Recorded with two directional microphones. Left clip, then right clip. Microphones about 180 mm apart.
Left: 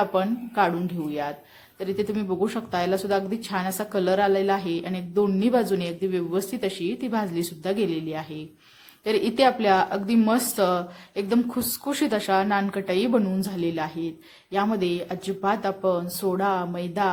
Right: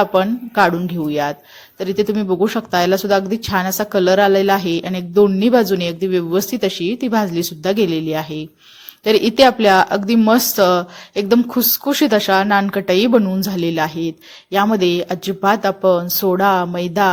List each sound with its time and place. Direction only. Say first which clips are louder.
0.0 s speech: right 8 dB; 35° right (ahead or behind)